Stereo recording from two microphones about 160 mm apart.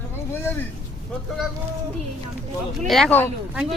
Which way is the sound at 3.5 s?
5° right (ahead or behind).